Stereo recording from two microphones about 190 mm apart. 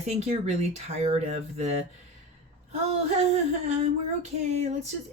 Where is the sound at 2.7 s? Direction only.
35° right (ahead or behind).